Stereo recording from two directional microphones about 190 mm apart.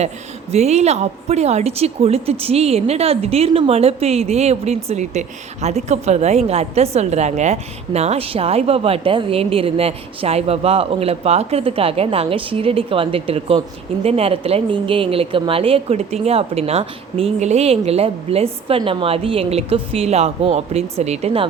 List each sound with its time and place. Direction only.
0.5 s a woman's voice: 35° right (ahead or behind)